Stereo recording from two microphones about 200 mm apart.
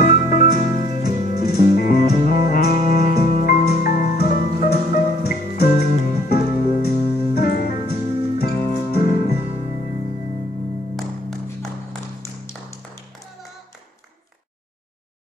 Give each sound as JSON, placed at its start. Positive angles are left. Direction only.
{"t": 0.0, "sound": "music", "side_deg": 45}
{"t": 11.4, "sound": "music", "side_deg": 15}